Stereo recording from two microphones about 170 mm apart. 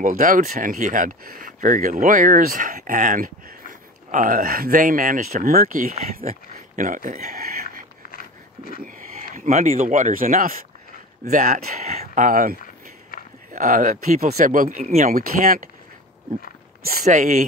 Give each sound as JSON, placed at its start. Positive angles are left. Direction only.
{"t": 0.0, "sound": "speech", "side_deg": -50}
{"t": 6.5, "sound": "a sound", "side_deg": -50}
{"t": 8.8, "sound": "speech", "side_deg": -50}
{"t": 14.8, "sound": "speech", "side_deg": -40}
{"t": 15.0, "sound": "speech", "side_deg": -55}
{"t": 16.8, "sound": "speech", "side_deg": -60}
{"t": 17.1, "sound": "speech", "side_deg": -45}